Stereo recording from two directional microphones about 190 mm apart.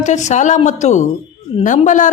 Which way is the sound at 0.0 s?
40° left (ahead or behind).